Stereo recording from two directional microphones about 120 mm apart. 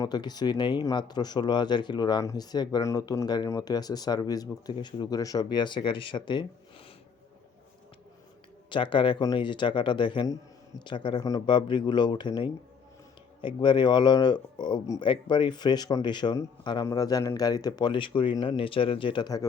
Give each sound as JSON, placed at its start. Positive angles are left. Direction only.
{"t": 0.0, "sound": "speech", "side_deg": 35}
{"t": 8.7, "sound": "speech", "side_deg": 45}
{"t": 11.2, "sound": "speech", "side_deg": 30}